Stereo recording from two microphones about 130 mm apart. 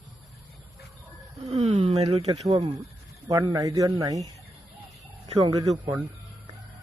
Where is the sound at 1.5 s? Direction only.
60° right (ahead or behind).